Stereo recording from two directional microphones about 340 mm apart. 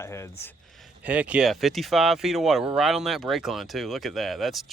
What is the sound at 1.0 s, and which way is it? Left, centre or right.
Speech, centre.